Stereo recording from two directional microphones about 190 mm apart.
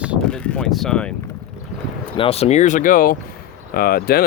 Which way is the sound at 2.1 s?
30° left (ahead or behind).